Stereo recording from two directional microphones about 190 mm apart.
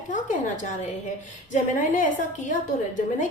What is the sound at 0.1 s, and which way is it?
Speech, 40° left (ahead or behind).